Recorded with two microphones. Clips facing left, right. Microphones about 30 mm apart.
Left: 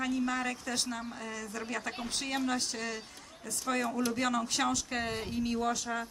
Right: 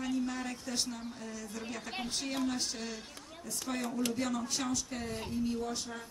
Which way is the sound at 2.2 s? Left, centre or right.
Left.